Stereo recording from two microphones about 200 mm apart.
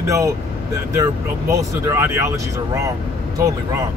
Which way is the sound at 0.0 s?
15° right (ahead or behind).